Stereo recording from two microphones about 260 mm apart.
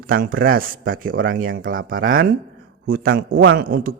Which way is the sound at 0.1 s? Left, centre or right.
Right.